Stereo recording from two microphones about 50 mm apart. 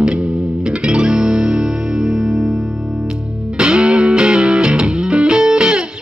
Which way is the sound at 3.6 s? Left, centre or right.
Centre.